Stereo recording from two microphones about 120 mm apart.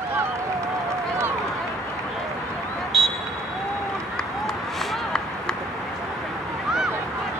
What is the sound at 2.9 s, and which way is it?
Vehicle, centre (ahead or behind).